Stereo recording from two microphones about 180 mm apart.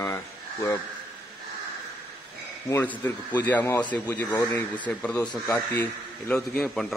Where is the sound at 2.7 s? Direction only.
10° left (ahead or behind).